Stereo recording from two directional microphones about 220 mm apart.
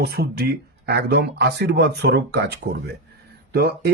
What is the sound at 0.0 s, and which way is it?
A man's voice, 45° right (ahead or behind).